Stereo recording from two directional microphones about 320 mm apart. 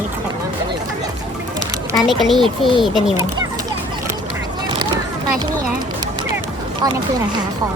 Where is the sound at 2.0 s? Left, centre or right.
Centre.